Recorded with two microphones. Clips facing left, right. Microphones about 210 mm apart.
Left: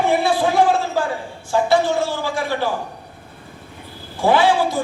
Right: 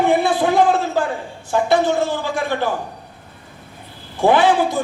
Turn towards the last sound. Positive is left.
turn(degrees=-20)  # may be behind; listen again after turning